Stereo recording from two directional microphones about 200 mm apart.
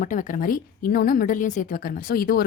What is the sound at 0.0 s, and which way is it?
A woman's voice, 40° left (ahead or behind).